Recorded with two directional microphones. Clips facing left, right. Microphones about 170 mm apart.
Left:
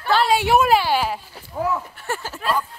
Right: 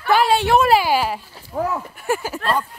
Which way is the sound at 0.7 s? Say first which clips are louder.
Right 2 dB; 5° right (ahead or behind).